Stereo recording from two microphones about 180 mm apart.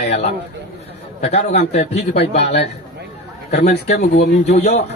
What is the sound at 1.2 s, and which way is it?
A man's voice, 35° left (ahead or behind).